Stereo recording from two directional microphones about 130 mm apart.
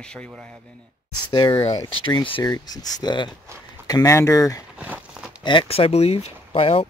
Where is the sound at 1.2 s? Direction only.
35° left (ahead or behind).